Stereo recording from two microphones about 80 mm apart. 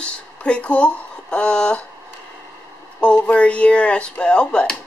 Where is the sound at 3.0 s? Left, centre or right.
Centre.